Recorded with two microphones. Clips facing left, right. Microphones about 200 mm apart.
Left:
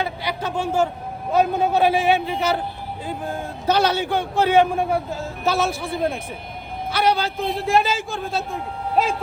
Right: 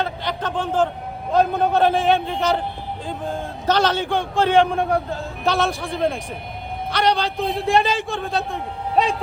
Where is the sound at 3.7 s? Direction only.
10° left (ahead or behind).